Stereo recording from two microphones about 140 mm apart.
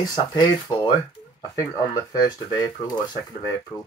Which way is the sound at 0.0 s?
30° left (ahead or behind).